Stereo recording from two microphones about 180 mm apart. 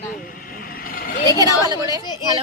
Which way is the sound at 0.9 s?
50° left (ahead or behind).